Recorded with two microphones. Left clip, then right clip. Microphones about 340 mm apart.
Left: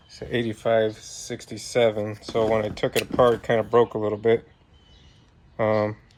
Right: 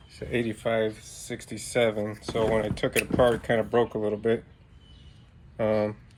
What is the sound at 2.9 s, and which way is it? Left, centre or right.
Speech, left.